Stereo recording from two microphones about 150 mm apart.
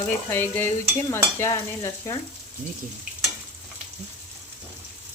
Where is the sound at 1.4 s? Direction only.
20° left (ahead or behind).